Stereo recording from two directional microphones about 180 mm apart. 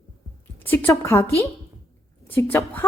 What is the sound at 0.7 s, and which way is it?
Speech, 15° left (ahead or behind).